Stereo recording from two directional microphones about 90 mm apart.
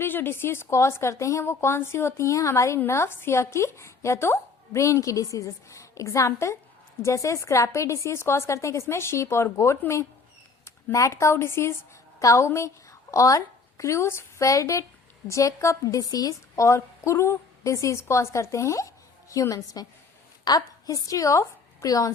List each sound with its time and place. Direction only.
0.0 s a woman's voice: 25° left (ahead or behind); by 22.1 s 40° left (ahead or behind)